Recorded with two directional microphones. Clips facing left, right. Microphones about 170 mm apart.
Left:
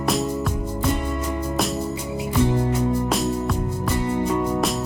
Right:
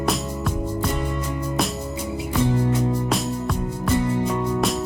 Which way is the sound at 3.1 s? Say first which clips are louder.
Left 2 dB; centre (ahead or behind).